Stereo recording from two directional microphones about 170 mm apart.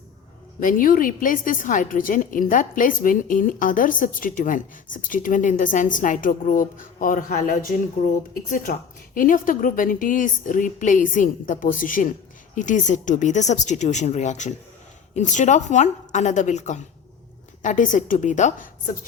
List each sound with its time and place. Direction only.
0.6 s a woman's voice: 55° left (ahead or behind)